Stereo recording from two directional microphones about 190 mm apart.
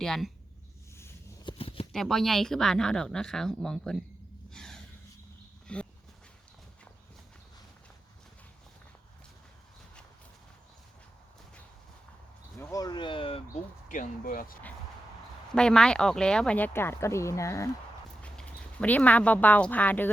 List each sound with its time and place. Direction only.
0.0 s speech: centre (ahead or behind)
1.5 s shuffling cards: 30° left (ahead or behind)
1.9 s speech: centre (ahead or behind)
4.5 s a sound: 5° left (ahead or behind)
12.5 s a sound: 20° left (ahead or behind)
13.8 s speech: 45° left (ahead or behind)
15.5 s speech: 5° left (ahead or behind)